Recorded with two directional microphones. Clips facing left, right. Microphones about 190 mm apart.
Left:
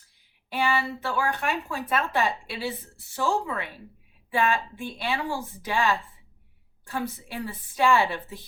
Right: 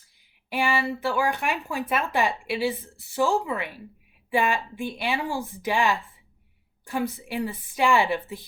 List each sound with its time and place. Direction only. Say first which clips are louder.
0.5 s speech: right 1 dB; 10° right (ahead or behind)